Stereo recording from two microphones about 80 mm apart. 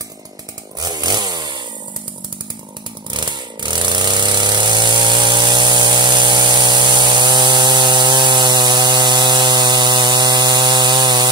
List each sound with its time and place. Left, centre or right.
0.7 s chainsaw: right
3.1 s chainsaw: right